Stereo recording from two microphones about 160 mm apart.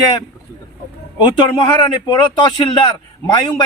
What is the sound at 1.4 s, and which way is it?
A man's voice, 30° left (ahead or behind).